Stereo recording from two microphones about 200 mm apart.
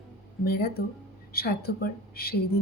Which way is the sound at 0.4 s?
50° left (ahead or behind).